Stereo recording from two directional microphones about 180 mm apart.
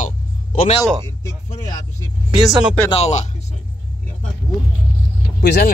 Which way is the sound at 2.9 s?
35° left (ahead or behind).